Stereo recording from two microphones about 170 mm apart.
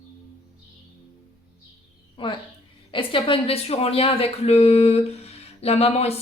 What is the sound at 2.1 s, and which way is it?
A woman's voice, 30° left (ahead or behind).